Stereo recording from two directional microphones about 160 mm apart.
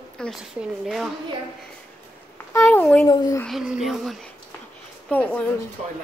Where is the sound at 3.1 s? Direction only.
25° left (ahead or behind).